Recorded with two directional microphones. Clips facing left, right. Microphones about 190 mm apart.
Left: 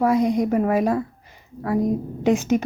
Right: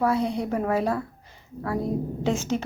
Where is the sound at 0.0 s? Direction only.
15° left (ahead or behind).